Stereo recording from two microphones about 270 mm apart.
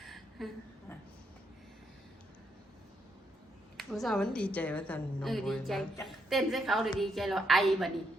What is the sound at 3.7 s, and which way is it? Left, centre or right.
A woman's voice, centre.